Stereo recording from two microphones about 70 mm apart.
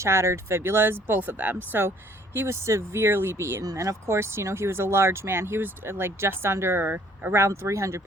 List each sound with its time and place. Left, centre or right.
0.0 s speech: right
2.3 s speech: right
3.6 s speech: right
7.4 s speech: right